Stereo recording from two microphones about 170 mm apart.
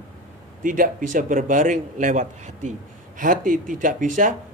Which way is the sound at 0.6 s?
50° right (ahead or behind).